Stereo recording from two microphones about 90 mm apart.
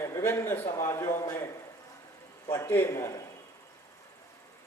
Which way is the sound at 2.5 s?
30° left (ahead or behind).